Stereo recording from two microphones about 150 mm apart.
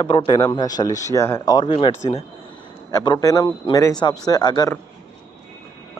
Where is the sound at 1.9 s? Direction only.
45° left (ahead or behind).